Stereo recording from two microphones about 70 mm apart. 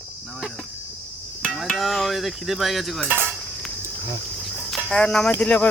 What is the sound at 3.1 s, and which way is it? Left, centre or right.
Cutlery, right.